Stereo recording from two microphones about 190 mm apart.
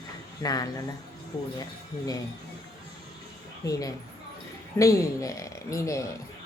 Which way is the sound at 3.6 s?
15° left (ahead or behind).